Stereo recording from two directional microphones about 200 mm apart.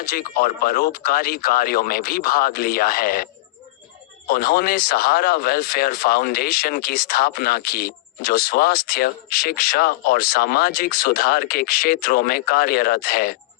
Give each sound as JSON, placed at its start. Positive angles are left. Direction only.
{"t": 0.0, "sound": "speech", "side_deg": 50}
{"t": 4.3, "sound": "speech", "side_deg": 50}